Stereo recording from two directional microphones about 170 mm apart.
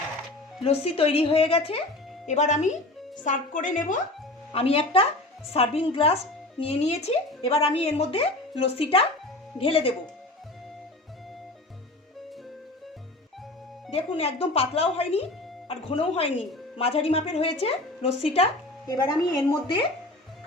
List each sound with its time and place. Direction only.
0.6 s a woman's voice: 35° left (ahead or behind)
2.2 s a woman's voice: 45° left (ahead or behind)
4.5 s a woman's voice: 35° left (ahead or behind)
13.9 s a woman's voice: 35° left (ahead or behind)
18.9 s a woman's voice: 20° left (ahead or behind)